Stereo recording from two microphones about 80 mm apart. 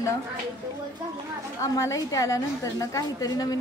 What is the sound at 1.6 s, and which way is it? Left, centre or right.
A woman's voice, left.